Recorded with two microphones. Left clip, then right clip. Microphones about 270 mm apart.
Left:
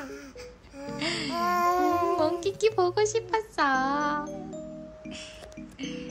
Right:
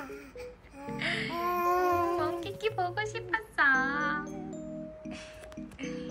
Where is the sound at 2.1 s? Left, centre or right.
Centre.